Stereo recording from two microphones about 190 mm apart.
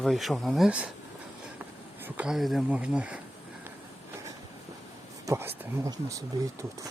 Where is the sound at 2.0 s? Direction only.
5° right (ahead or behind).